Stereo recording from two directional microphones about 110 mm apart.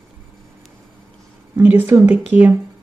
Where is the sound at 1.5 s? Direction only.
20° right (ahead or behind).